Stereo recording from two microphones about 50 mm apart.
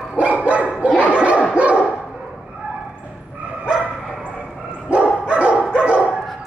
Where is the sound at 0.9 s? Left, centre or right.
Left.